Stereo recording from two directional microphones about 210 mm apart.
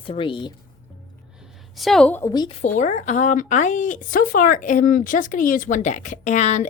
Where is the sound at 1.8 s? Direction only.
Centre (ahead or behind).